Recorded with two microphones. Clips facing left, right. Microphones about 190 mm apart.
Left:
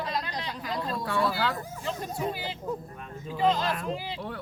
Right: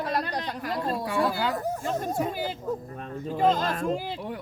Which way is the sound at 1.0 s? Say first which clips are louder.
Right 1 dB; 10° right (ahead or behind).